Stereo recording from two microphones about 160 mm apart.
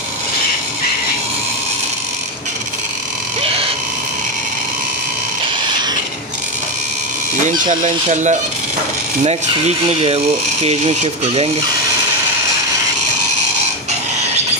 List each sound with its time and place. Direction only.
7.8 s speech: 50° right (ahead or behind)
9.8 s speech: 40° right (ahead or behind)